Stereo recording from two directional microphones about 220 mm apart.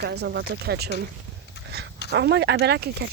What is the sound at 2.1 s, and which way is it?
Speech, 50° right (ahead or behind).